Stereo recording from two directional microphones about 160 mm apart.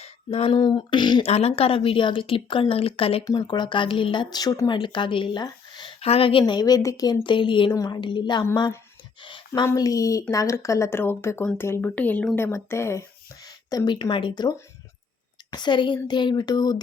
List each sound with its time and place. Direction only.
0.0 s a sound: 40° left (ahead or behind)
0.6 s speech: 30° left (ahead or behind)
1.3 s a woman's voice: 40° left (ahead or behind)
9.6 s speech: 20° left (ahead or behind); by 12.4 s 5° left (ahead or behind)
12.4 s a woman's voice: 15° left (ahead or behind)